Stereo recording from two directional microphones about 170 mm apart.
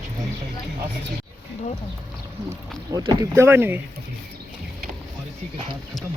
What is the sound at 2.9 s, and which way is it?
Speech, 20° right (ahead or behind).